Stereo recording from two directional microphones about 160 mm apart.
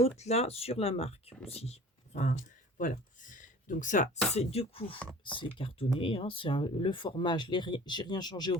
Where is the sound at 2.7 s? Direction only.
55° left (ahead or behind).